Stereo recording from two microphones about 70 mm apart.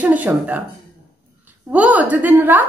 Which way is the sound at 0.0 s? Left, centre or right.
Right.